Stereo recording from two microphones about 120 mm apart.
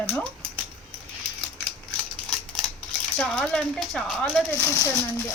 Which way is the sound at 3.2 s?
10° left (ahead or behind).